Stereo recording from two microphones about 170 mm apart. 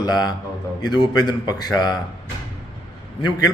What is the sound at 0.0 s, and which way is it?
A man's voice, 25° left (ahead or behind).